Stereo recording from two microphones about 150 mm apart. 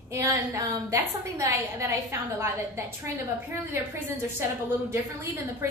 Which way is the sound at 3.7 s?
15° right (ahead or behind).